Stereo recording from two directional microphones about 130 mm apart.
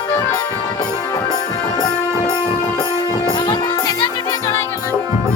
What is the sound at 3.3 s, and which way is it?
Music, 35° left (ahead or behind).